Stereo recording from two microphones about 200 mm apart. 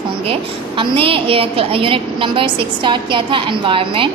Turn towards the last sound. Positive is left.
turn(degrees=-25)  # may be behind; listen again after turning